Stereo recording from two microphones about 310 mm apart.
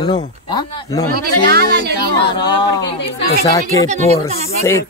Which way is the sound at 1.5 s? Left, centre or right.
Right.